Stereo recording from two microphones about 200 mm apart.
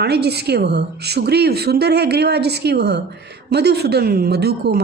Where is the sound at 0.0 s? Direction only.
55° right (ahead or behind).